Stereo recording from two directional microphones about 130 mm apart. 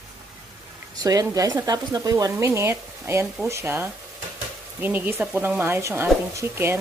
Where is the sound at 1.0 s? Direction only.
25° right (ahead or behind).